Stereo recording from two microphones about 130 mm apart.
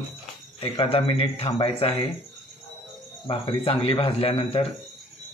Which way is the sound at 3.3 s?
45° left (ahead or behind).